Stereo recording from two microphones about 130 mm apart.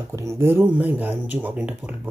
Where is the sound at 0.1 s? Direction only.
20° right (ahead or behind).